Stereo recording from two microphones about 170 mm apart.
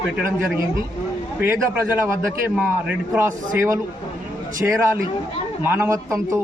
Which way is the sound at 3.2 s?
15° right (ahead or behind).